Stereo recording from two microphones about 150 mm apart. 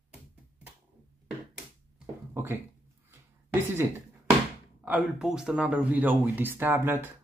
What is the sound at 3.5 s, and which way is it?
A woman's voice, 15° right (ahead or behind).